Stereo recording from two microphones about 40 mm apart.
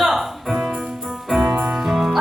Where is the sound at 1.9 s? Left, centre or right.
Centre.